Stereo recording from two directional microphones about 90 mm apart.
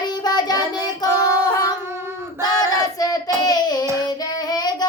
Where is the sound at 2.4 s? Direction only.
45° left (ahead or behind).